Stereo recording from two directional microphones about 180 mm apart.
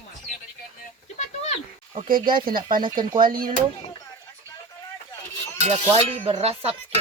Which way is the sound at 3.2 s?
50° right (ahead or behind).